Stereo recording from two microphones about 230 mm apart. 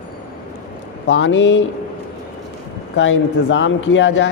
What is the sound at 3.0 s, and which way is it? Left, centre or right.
Speech, left.